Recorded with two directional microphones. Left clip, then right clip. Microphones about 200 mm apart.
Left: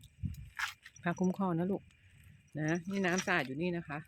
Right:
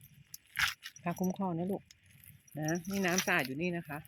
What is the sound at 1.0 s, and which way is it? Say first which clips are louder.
Speech: left 2 dB; 20° left (ahead or behind).